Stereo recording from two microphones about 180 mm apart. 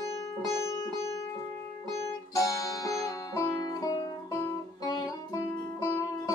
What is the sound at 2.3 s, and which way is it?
Music, 15° left (ahead or behind).